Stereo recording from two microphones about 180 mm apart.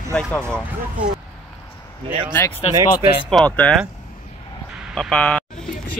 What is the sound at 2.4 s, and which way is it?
Speech, 15° left (ahead or behind).